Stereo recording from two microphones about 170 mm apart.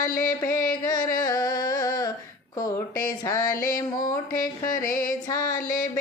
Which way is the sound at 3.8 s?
20° left (ahead or behind).